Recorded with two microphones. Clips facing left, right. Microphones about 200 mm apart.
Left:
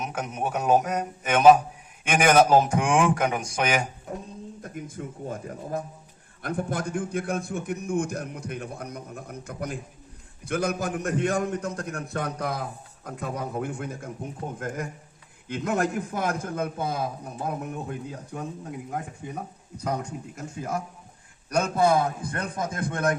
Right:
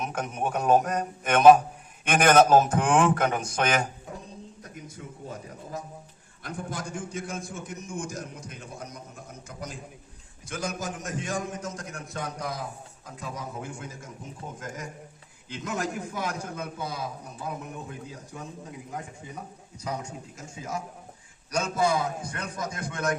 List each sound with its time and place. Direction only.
0.0 s a man's voice: 10° left (ahead or behind)
4.6 s a man's voice: 50° left (ahead or behind)